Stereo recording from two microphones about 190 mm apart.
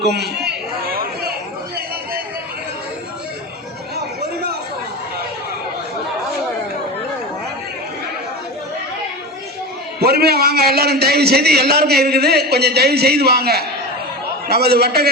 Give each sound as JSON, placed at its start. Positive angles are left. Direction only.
{"t": 0.0, "sound": "chatter", "side_deg": -60}
{"t": 10.0, "sound": "a man's voice", "side_deg": -55}